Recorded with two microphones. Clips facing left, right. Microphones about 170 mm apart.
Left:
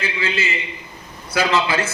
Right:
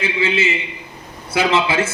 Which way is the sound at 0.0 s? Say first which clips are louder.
Right 5 dB; 25° right (ahead or behind).